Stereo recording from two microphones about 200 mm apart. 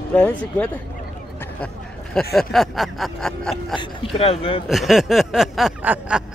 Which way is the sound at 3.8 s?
30° left (ahead or behind).